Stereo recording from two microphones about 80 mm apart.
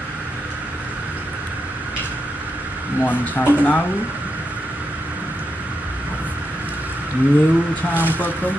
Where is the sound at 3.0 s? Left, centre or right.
Left.